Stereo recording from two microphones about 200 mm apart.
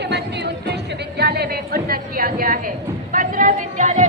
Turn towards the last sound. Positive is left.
turn(degrees=-40)  # may be behind; listen again after turning